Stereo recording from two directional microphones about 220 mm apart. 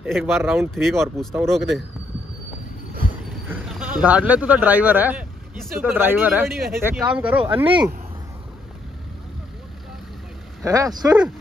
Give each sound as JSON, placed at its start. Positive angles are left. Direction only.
{"t": 0.0, "sound": "speech", "side_deg": -5}
{"t": 0.7, "sound": "speech", "side_deg": 0}
{"t": 3.3, "sound": "speech", "side_deg": -5}
{"t": 7.6, "sound": "speech", "side_deg": -20}
{"t": 10.6, "sound": "speech", "side_deg": -15}